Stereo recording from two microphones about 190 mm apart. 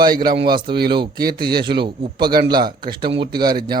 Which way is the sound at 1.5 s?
60° right (ahead or behind).